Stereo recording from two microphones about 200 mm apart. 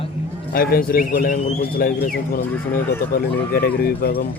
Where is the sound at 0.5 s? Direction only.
45° left (ahead or behind).